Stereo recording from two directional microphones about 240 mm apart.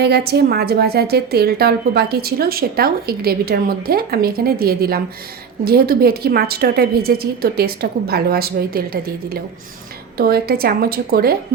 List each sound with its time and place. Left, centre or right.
0.0 s a woman's voice: right